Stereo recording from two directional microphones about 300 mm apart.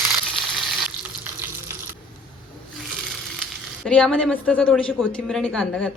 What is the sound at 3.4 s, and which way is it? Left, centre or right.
Speech, centre.